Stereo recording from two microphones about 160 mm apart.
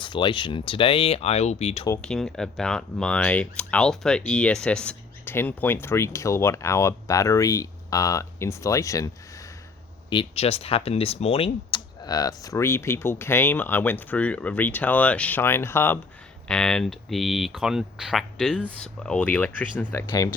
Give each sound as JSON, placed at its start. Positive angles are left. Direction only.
{"t": 0.0, "sound": "speech", "side_deg": 30}
{"t": 2.0, "sound": "speech", "side_deg": 5}
{"t": 10.1, "sound": "speech", "side_deg": 35}
{"t": 12.0, "sound": "speech", "side_deg": 25}
{"t": 16.5, "sound": "speech", "side_deg": 5}